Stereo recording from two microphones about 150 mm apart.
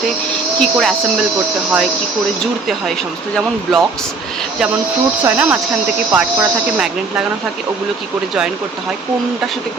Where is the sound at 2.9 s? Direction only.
Centre (ahead or behind).